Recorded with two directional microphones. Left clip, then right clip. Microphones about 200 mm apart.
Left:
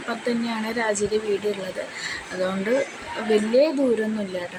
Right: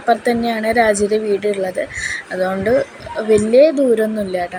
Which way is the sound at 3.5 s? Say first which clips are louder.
Right 9 dB; 15° right (ahead or behind).